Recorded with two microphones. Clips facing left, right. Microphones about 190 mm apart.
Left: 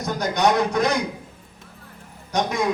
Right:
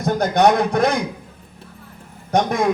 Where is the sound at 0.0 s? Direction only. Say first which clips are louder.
Right 5 dB; 55° right (ahead or behind).